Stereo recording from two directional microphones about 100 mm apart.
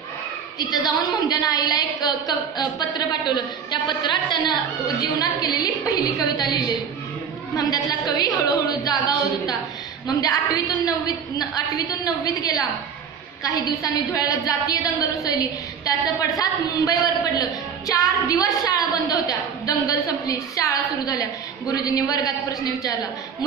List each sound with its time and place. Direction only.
0.8 s a woman's voice: 40° left (ahead or behind)
15.8 s a woman's voice: 35° left (ahead or behind)
19.9 s a woman's voice: 35° left (ahead or behind)